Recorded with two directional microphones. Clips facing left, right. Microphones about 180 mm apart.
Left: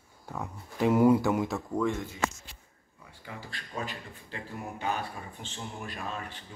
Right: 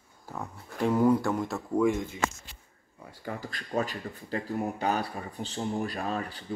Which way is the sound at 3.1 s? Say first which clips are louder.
Right 6 dB; 40° right (ahead or behind).